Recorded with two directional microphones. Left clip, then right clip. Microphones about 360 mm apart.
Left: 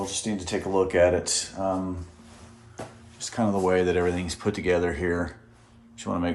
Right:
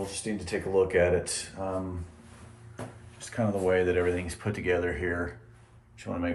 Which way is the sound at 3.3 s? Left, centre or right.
Centre.